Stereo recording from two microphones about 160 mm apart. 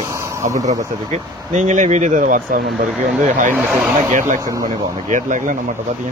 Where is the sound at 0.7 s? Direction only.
50° right (ahead or behind).